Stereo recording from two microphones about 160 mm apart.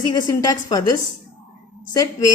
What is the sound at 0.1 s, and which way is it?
A woman's voice, 20° left (ahead or behind).